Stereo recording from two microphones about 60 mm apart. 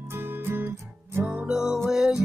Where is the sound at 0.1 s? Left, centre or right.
Right.